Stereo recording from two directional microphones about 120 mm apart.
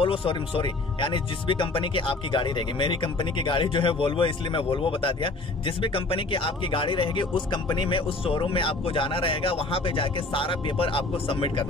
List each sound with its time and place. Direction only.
0.0 s speech: 50° left (ahead or behind)